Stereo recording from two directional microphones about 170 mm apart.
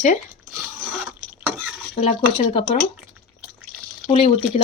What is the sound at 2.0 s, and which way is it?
Speech, 35° left (ahead or behind).